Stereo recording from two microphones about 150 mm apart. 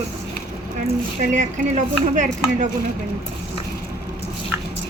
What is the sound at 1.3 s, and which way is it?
A woman's voice, 55° right (ahead or behind).